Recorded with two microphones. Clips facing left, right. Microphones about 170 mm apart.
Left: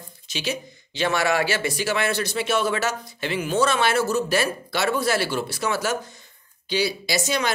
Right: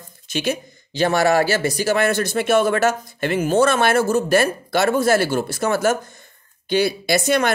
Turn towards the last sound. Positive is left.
turn(degrees=-55)  # may be behind; listen again after turning